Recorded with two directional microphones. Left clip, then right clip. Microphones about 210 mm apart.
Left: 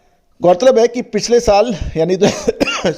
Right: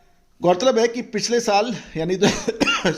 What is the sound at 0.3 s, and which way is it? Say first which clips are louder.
A man's voice: left 7 dB; 30° left (ahead or behind).